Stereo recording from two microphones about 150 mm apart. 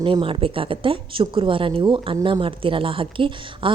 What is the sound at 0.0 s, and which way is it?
A woman's voice, 35° right (ahead or behind).